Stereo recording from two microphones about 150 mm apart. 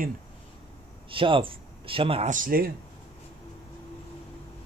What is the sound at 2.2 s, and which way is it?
Speech, 65° right (ahead or behind).